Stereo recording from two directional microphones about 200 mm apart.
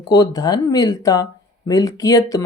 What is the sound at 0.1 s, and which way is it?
Speech, 20° left (ahead or behind).